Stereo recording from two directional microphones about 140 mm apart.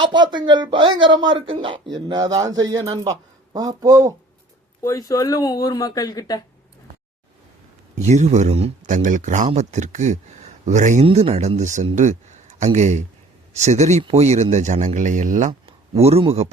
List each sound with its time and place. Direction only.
0.0 s a man's voice: 35° right (ahead or behind)
4.8 s speech: 25° left (ahead or behind)
7.9 s speech: 55° right (ahead or behind)
9.0 s speech: 65° right (ahead or behind)
11.0 s speech: 45° right (ahead or behind); by 15.5 s 60° right (ahead or behind)
16.0 s speech: 45° right (ahead or behind)